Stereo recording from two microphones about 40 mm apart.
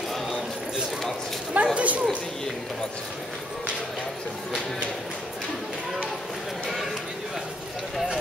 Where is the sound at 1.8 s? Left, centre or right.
Right.